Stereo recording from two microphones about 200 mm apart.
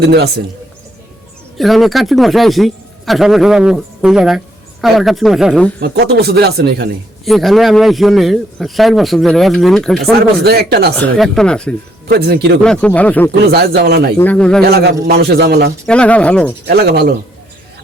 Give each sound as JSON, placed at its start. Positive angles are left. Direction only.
{"t": 0.0, "sound": "a man's voice", "side_deg": -55}
{"t": 1.5, "sound": "a man's voice", "side_deg": 0}
{"t": 5.8, "sound": "speech", "side_deg": -55}
{"t": 7.3, "sound": "a man's voice", "side_deg": 0}
{"t": 10.4, "sound": "a man's voice", "side_deg": -55}
{"t": 11.2, "sound": "a man's voice", "side_deg": 5}
{"t": 12.0, "sound": "a man's voice", "side_deg": -50}
{"t": 12.6, "sound": "speech", "side_deg": 5}
{"t": 13.4, "sound": "a man's voice", "side_deg": -50}
{"t": 14.2, "sound": "a man's voice", "side_deg": 5}
{"t": 14.6, "sound": "a man's voice", "side_deg": -50}
{"t": 15.9, "sound": "speech", "side_deg": 5}
{"t": 16.6, "sound": "a man's voice", "side_deg": -50}